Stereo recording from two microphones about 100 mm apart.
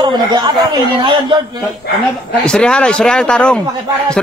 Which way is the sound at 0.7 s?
55° right (ahead or behind).